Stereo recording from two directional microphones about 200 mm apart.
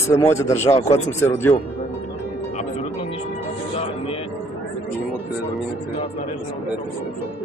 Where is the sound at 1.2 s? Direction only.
10° left (ahead or behind).